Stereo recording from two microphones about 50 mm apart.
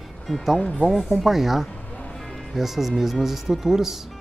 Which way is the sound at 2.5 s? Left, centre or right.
Centre.